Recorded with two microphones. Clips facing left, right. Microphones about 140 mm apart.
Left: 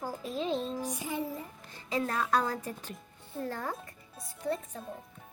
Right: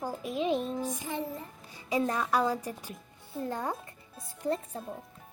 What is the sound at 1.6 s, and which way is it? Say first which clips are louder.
Speech: right 3 dB; 15° right (ahead or behind).